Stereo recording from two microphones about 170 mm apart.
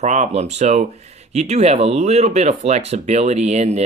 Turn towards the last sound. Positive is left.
turn(degrees=-40)  # may be behind; listen again after turning